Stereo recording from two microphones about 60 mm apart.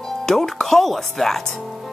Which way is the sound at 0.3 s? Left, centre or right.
Centre.